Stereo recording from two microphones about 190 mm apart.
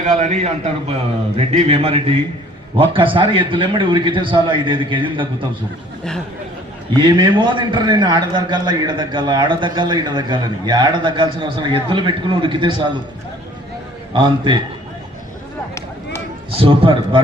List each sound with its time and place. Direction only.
0.0 s a man's voice: 40° right (ahead or behind)
6.9 s a man's voice: 25° right (ahead or behind)
14.1 s a man's voice: 25° right (ahead or behind)
16.5 s a man's voice: 30° right (ahead or behind)